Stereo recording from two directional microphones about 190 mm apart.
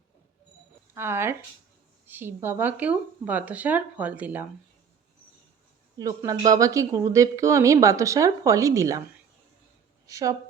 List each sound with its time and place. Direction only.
0.9 s speech: 10° right (ahead or behind)
6.0 s speech: 20° right (ahead or behind)